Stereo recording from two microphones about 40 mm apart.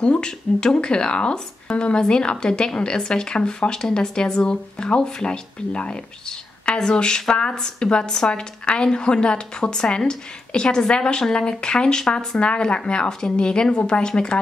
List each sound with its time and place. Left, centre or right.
0.0 s speech: left
12.4 s speech: left